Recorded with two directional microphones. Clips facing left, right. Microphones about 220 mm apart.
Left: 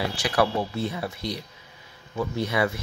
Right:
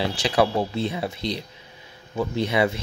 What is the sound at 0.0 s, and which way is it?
Speech, 25° right (ahead or behind).